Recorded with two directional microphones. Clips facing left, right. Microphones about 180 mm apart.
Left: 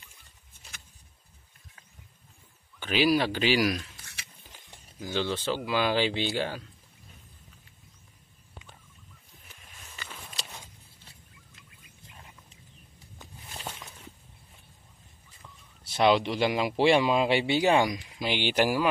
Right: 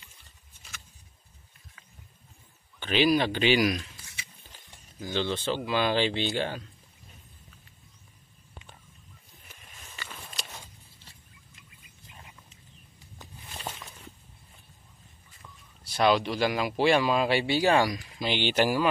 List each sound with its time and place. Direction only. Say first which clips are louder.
2.8 s speech: right 1 dB; 5° left (ahead or behind)
3.9 s a sound: right 2 dB; 65° left (ahead or behind)
5.0 s speech: even; 10° left (ahead or behind)
15.8 s speech: left 1 dB; 20° left (ahead or behind)